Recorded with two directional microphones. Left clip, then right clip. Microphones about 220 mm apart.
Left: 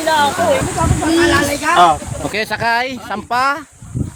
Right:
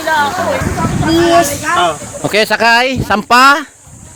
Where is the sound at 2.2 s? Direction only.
35° right (ahead or behind).